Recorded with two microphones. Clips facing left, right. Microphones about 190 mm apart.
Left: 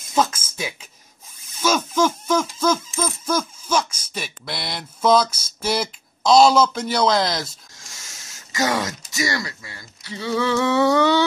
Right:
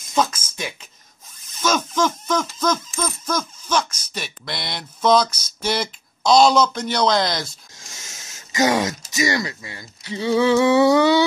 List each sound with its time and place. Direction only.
0.1 s a sound: 5° left (ahead or behind)
1.6 s mechanisms: 10° left (ahead or behind)
8.5 s speech: 15° right (ahead or behind)